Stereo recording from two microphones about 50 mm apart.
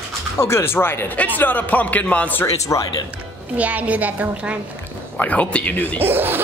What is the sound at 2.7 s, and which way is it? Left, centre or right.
Speech, left.